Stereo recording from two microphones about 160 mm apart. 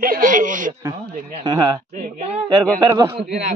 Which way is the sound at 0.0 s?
60° right (ahead or behind).